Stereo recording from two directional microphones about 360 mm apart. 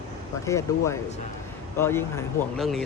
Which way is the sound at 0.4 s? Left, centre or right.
Centre.